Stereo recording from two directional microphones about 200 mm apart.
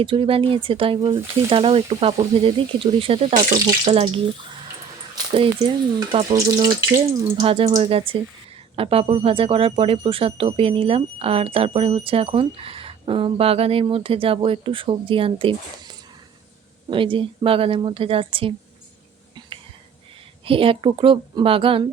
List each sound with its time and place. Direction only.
0.0 s speech: 25° right (ahead or behind)
20.4 s speech: 25° right (ahead or behind)